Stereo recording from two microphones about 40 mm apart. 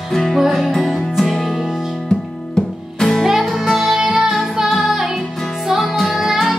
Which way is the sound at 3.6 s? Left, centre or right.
Centre.